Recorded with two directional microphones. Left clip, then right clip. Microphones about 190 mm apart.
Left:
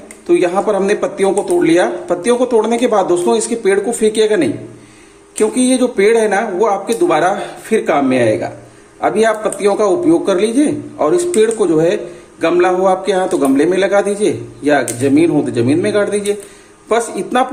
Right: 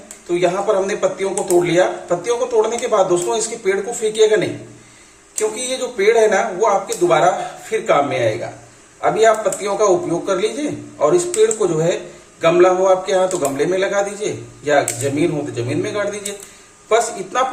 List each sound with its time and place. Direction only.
0.3 s speech: 55° left (ahead or behind)
5.5 s a man's voice: 55° left (ahead or behind)